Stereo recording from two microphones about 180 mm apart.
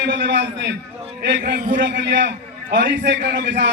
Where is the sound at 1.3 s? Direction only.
65° right (ahead or behind).